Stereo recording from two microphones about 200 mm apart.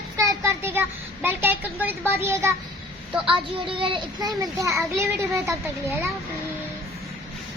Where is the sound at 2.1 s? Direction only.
10° right (ahead or behind).